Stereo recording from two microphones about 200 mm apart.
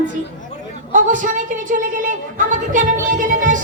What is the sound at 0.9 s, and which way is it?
A woman's voice, 40° right (ahead or behind).